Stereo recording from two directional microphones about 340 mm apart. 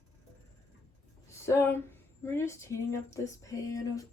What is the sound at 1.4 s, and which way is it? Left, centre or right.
Speech, centre.